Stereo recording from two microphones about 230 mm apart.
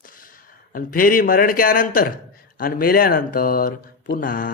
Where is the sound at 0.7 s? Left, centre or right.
Left.